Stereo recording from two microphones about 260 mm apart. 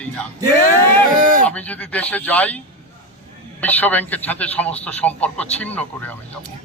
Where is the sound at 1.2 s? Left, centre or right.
Right.